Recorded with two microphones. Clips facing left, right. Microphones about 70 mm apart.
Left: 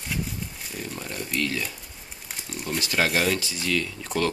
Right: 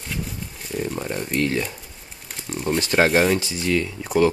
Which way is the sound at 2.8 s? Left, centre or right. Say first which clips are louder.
Right 6 dB; right.